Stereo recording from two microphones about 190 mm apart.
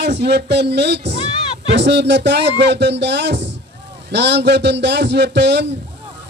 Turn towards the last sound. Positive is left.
turn(degrees=-65)  # may be behind; listen again after turning